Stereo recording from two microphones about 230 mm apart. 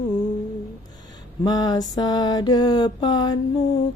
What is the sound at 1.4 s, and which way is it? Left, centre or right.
Mantra, centre.